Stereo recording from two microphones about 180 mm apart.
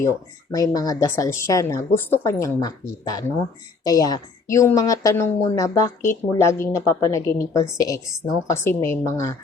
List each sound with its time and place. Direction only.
0.0 s a woman's voice: 15° left (ahead or behind)